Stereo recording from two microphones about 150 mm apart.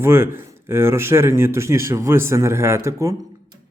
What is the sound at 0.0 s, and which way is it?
Speech, 15° right (ahead or behind).